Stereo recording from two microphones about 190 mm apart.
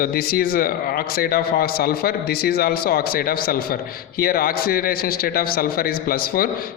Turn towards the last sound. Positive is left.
turn(degrees=50)  # may be behind; listen again after turning